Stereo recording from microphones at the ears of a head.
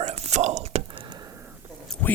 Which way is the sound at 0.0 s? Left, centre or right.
Right.